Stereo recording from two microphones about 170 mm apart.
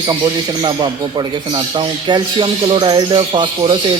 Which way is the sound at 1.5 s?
30° right (ahead or behind).